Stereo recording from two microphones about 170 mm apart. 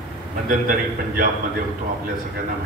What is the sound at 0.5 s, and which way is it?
Speech, 55° right (ahead or behind).